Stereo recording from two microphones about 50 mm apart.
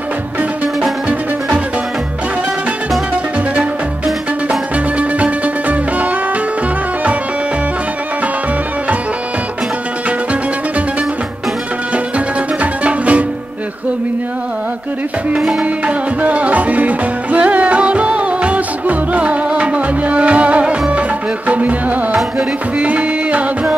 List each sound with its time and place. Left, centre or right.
4.5 s music: right
12.8 s music: right
15.6 s music: right